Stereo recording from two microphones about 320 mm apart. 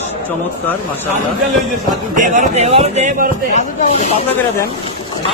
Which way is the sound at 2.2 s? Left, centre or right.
Right.